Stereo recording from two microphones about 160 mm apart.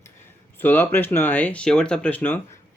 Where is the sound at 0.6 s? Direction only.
15° left (ahead or behind).